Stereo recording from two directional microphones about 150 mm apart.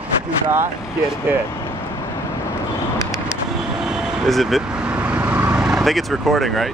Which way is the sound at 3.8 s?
5° right (ahead or behind).